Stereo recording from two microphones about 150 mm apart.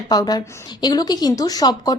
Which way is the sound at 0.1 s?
25° left (ahead or behind).